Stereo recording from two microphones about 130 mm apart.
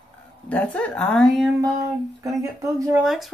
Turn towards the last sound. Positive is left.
turn(degrees=0)  # may be behind; listen again after turning